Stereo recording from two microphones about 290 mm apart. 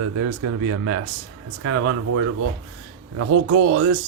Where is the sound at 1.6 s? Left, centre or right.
Right.